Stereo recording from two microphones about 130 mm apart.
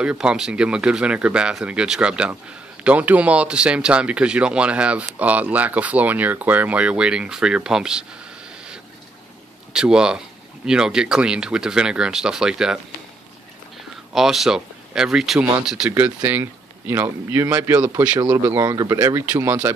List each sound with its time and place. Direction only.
0.0 s speech: 5° right (ahead or behind)
9.7 s speech: 5° right (ahead or behind)
14.1 s speech: centre (ahead or behind)
18.6 s speech: 25° right (ahead or behind)